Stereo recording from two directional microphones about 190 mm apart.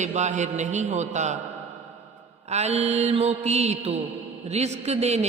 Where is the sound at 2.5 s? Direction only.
35° right (ahead or behind).